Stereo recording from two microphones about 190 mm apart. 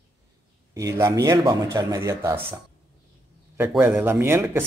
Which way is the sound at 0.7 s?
15° right (ahead or behind).